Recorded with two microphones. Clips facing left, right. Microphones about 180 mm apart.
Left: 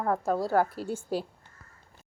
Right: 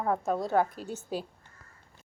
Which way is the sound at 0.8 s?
10° left (ahead or behind).